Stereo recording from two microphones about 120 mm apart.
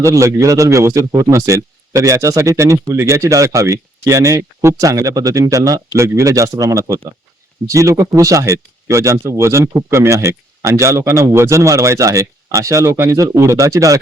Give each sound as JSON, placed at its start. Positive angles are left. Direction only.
{"t": 0.0, "sound": "speech", "side_deg": -25}